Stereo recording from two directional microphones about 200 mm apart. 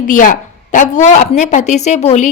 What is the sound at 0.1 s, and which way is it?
Speech, 40° left (ahead or behind).